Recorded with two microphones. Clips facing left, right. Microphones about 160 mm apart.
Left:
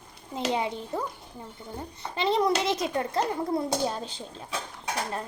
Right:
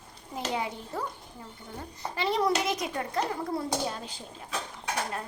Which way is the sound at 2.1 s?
25° left (ahead or behind).